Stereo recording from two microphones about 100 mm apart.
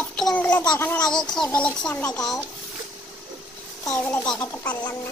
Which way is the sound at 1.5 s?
10° left (ahead or behind).